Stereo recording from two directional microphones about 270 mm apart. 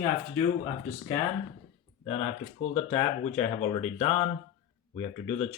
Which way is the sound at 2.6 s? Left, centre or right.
Left.